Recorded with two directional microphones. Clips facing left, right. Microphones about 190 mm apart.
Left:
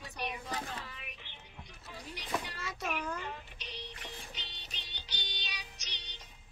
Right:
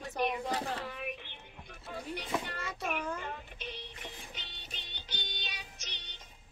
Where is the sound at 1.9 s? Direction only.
55° right (ahead or behind).